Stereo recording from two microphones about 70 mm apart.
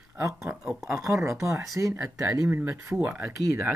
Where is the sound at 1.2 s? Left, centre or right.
Right.